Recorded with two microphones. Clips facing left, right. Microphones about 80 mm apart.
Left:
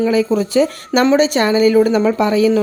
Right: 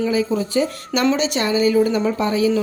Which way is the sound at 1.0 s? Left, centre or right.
Left.